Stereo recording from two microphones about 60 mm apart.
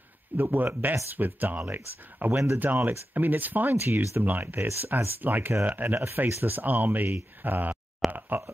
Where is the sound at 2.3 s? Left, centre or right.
Right.